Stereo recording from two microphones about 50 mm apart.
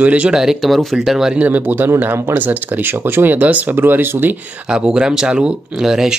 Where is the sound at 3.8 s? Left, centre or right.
Right.